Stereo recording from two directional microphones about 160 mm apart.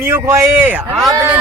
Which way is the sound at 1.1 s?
20° right (ahead or behind).